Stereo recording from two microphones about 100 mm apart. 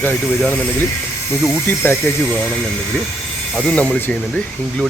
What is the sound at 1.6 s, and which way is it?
Speech, 25° left (ahead or behind).